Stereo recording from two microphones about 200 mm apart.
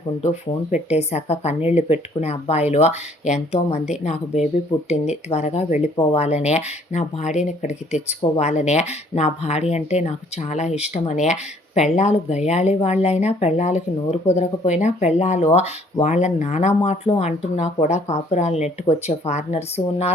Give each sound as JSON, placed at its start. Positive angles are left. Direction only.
{"t": 0.7, "sound": "speech", "side_deg": 35}